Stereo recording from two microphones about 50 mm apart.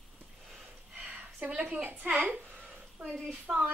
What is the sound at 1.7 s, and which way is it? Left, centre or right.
Speech, right.